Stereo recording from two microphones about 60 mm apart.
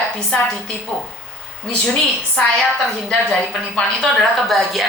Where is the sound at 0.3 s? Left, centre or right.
Centre.